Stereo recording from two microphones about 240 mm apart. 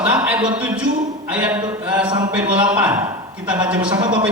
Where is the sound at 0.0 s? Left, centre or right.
Centre.